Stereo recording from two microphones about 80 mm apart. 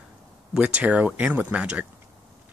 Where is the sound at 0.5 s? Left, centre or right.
Centre.